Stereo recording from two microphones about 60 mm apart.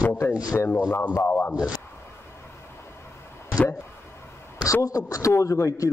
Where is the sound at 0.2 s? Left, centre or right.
Left.